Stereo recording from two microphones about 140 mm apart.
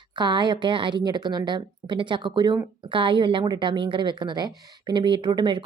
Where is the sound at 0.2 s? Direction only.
30° right (ahead or behind).